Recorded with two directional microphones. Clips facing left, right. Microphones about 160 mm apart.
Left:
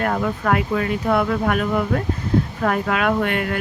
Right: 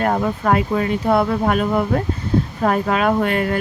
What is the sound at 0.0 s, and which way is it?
Speech, 30° right (ahead or behind).